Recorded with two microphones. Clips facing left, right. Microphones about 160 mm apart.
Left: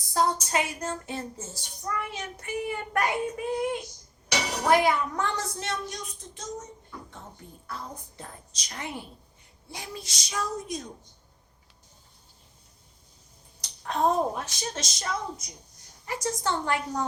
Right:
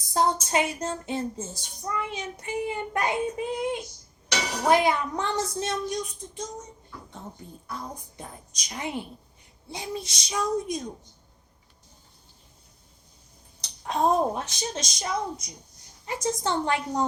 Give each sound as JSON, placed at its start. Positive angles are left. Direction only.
{"t": 0.1, "sound": "child singing", "side_deg": -20}
{"t": 7.7, "sound": "a woman's voice", "side_deg": -15}
{"t": 9.6, "sound": "child singing", "side_deg": -20}
{"t": 13.6, "sound": "child singing", "side_deg": -20}